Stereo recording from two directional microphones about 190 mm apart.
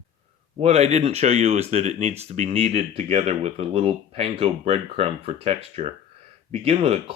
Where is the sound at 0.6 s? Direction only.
35° right (ahead or behind).